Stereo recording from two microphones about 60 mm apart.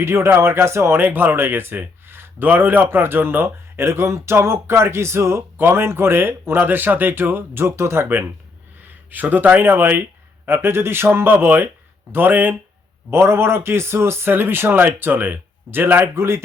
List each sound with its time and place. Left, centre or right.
0.0 s speech: right
0.9 s speech: right
9.0 s speech: right
13.1 s speech: right